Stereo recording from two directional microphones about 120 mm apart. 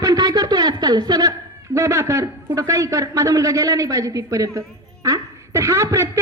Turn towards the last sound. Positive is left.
turn(degrees=-25)  # may be behind; listen again after turning